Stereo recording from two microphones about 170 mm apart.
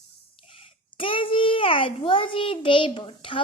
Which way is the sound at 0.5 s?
35° left (ahead or behind).